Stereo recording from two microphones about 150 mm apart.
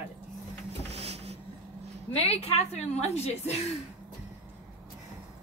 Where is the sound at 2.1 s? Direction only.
40° left (ahead or behind).